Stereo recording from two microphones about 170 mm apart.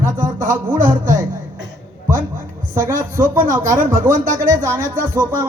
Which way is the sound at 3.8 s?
50° right (ahead or behind).